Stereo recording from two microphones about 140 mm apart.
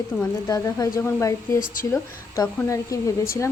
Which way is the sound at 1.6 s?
75° left (ahead or behind).